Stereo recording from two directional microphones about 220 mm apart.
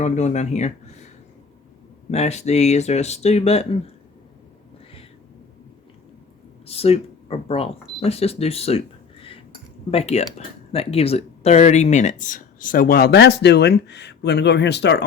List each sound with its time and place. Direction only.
0.0 s speech: 30° left (ahead or behind)
2.0 s speech: 30° left (ahead or behind)
6.7 s speech: 25° left (ahead or behind)
9.9 s speech: 30° left (ahead or behind); by 15.0 s 50° left (ahead or behind)